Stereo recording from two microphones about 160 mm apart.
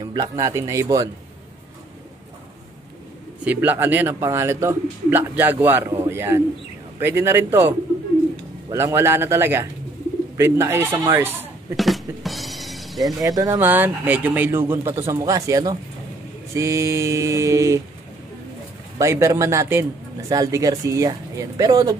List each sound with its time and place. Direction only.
0.0 s speech: 25° right (ahead or behind)
3.4 s a man's voice: 10° right (ahead or behind)
11.7 s music: centre (ahead or behind)
13.2 s speech: 25° right (ahead or behind)
13.6 s a man's voice: 10° right (ahead or behind)
18.9 s speech: 20° right (ahead or behind)